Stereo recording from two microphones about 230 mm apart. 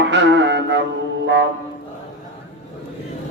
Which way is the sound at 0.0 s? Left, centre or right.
Right.